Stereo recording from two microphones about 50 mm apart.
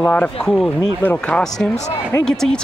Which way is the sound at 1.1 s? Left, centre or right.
Left.